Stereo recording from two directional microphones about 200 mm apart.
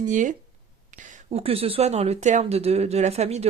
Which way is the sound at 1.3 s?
30° right (ahead or behind).